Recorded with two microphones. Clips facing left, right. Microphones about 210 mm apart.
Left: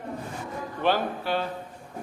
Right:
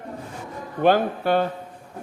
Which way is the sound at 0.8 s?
50° right (ahead or behind).